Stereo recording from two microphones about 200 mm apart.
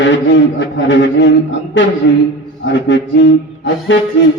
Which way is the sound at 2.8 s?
65° left (ahead or behind).